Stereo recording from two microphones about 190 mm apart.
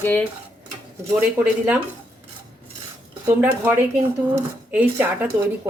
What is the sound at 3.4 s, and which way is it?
Speech, 10° right (ahead or behind).